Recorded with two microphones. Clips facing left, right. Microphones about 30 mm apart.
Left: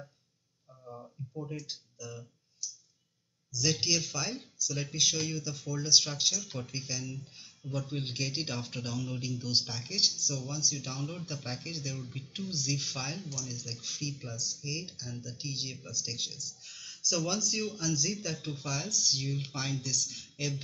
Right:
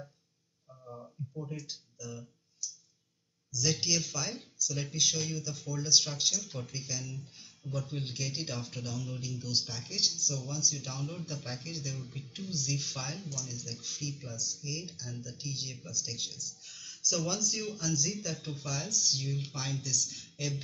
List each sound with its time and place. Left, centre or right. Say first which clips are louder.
0.7 s a sound: even; centre
1.4 s speech: left 2 dB; centre
1.7 s speech: left 1 dB; centre
2.6 s a sound: even; left
3.8 s speech: left 1 dB; centre
6.3 s speech: left 1 dB; centre
12.3 s speech: left 4 dB; left
12.5 s speech: left 1 dB; centre
16.7 s a sound: left 1 dB; centre
17.3 s speech: left 1 dB; centre